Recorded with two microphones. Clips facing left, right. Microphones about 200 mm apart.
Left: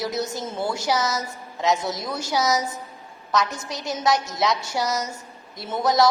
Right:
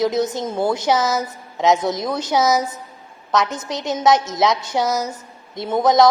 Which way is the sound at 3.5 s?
20° right (ahead or behind).